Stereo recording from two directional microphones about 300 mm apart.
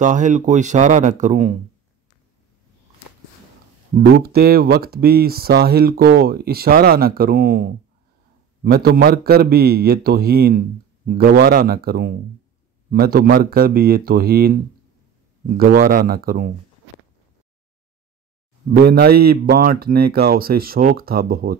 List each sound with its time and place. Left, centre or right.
0.0 s speech: right
3.9 s speech: right
18.7 s speech: right